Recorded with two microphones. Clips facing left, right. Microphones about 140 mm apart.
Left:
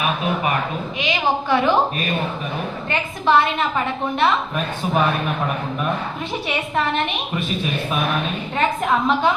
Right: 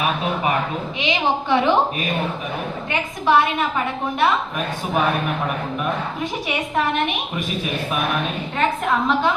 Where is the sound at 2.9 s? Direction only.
10° right (ahead or behind).